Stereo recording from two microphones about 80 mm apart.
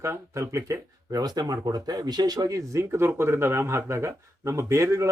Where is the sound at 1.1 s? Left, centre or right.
Right.